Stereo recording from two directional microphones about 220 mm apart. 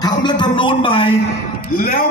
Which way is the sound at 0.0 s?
20° left (ahead or behind).